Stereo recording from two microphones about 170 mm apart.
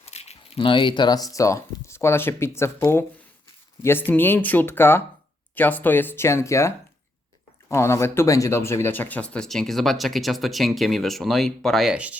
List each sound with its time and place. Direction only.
0.0 s speech: 40° left (ahead or behind); by 12.2 s 10° right (ahead or behind)